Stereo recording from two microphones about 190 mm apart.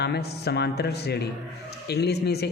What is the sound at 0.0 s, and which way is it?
Speech, 60° left (ahead or behind).